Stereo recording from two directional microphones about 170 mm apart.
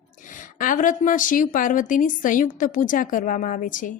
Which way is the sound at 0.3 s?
50° left (ahead or behind).